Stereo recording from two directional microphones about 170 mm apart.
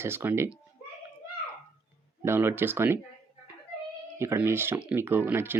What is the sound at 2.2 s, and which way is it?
Speech, 15° right (ahead or behind).